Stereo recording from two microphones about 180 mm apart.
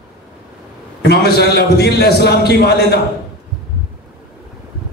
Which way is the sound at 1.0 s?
65° left (ahead or behind).